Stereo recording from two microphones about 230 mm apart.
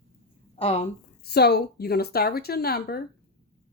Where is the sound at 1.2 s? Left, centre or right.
Left.